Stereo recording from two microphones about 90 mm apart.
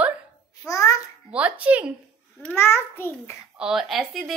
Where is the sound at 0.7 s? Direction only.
40° left (ahead or behind).